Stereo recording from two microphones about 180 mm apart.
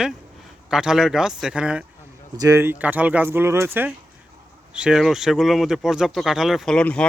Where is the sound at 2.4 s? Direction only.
15° right (ahead or behind).